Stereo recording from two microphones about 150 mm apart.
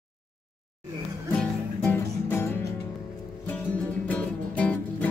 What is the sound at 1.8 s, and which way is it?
Music, 15° left (ahead or behind).